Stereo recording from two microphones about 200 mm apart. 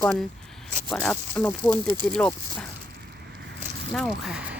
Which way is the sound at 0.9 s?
5° left (ahead or behind).